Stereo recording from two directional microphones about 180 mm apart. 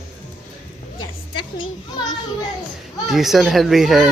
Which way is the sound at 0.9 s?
25° left (ahead or behind).